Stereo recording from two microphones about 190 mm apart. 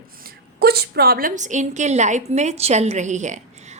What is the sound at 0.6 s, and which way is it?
A woman's voice, 55° right (ahead or behind).